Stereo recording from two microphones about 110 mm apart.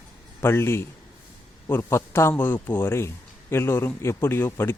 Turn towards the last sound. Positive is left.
turn(degrees=20)  # may be behind; listen again after turning